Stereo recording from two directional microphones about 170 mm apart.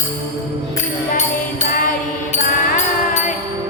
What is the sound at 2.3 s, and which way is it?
Music, 45° left (ahead or behind).